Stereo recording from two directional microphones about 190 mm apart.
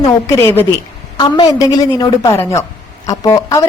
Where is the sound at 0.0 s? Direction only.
15° left (ahead or behind).